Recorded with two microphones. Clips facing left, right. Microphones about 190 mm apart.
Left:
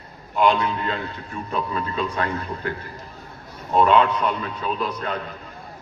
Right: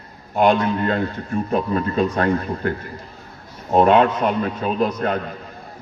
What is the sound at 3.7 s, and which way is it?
A man's voice, 50° right (ahead or behind).